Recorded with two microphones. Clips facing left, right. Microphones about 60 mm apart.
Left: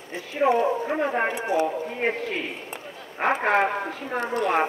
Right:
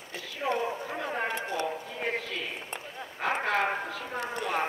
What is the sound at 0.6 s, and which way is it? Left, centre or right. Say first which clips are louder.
Speech: left 9 dB; left.